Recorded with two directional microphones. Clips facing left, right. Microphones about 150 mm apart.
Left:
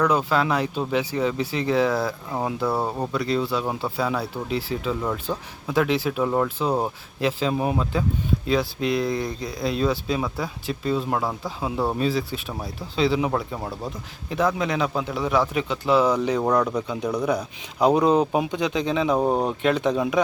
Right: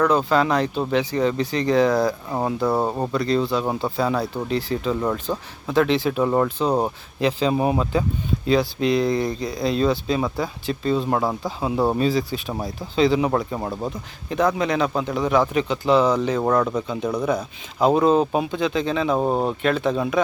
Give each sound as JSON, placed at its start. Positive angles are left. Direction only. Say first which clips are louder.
{"t": 0.1, "sound": "speech", "louder": "right 3 dB", "side_deg": 5}
{"t": 2.6, "sound": "speech", "louder": "right 4 dB", "side_deg": -15}
{"t": 3.1, "sound": "speech", "louder": "right 3 dB", "side_deg": 5}
{"t": 5.3, "sound": "speech", "louder": "right 2 dB", "side_deg": -5}
{"t": 5.6, "sound": "speech", "louder": "right 3 dB", "side_deg": 5}
{"t": 13.6, "sound": "speech", "louder": "right 4 dB", "side_deg": -15}
{"t": 14.3, "sound": "speech", "louder": "right 2 dB", "side_deg": 0}
{"t": 16.4, "sound": "speech", "louder": "right 1 dB", "side_deg": -5}
{"t": 16.8, "sound": "speech", "louder": "right 1 dB", "side_deg": 10}